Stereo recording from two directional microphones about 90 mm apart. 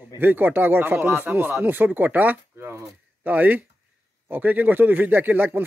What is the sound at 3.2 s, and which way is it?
Speech, 20° right (ahead or behind).